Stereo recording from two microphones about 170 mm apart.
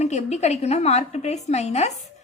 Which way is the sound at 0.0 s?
40° left (ahead or behind).